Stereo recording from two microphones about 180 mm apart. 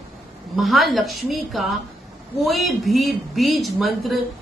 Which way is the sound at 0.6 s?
Centre (ahead or behind).